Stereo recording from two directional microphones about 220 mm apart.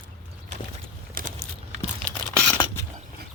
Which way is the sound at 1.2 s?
40° right (ahead or behind).